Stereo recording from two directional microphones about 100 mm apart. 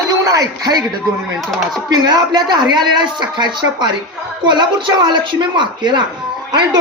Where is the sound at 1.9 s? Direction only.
45° right (ahead or behind).